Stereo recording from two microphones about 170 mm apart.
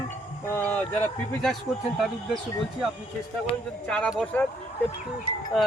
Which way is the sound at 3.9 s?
5° left (ahead or behind).